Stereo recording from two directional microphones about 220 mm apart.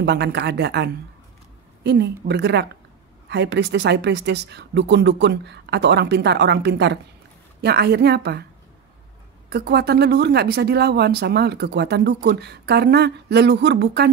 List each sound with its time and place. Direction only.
0.0 s speech: 50° right (ahead or behind)
9.5 s speech: 45° right (ahead or behind)